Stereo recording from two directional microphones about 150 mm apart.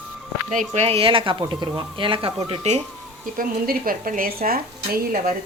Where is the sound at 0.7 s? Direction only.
45° right (ahead or behind).